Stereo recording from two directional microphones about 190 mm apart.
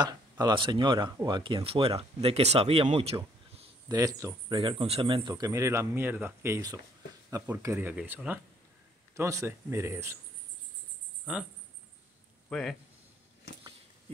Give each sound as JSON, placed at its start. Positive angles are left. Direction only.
{"t": 0.0, "sound": "speech", "side_deg": -20}
{"t": 3.9, "sound": "speech", "side_deg": -15}
{"t": 11.3, "sound": "speech", "side_deg": -5}
{"t": 12.4, "sound": "a man's voice", "side_deg": 0}